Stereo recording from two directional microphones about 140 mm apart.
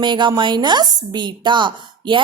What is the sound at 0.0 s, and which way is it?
A woman's voice, 35° right (ahead or behind).